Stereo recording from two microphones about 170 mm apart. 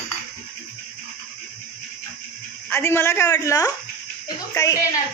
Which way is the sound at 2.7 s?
15° left (ahead or behind).